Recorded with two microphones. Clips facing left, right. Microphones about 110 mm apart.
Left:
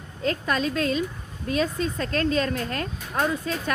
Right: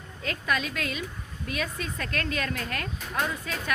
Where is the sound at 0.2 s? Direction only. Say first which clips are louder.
Left 5 dB; 35° left (ahead or behind).